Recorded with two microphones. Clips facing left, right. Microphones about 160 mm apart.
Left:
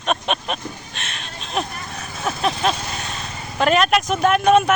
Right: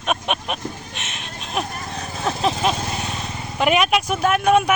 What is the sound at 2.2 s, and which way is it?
Vehicle, 25° right (ahead or behind).